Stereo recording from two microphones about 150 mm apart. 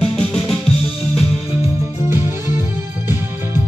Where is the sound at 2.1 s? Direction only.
15° right (ahead or behind).